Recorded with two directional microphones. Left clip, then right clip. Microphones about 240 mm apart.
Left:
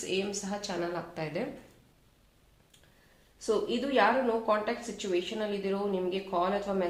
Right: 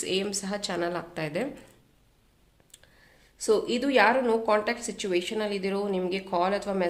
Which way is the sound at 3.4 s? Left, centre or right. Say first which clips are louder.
Right 5 dB; right.